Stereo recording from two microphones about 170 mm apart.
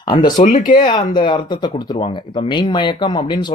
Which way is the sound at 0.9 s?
25° left (ahead or behind).